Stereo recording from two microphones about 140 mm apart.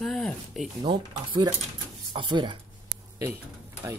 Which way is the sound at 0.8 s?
35° right (ahead or behind).